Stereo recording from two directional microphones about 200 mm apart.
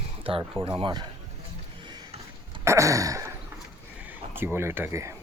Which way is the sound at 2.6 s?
15° right (ahead or behind).